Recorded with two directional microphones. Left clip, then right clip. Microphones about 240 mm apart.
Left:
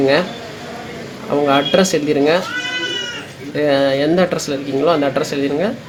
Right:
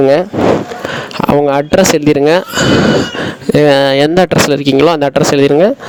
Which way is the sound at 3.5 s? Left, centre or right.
Right.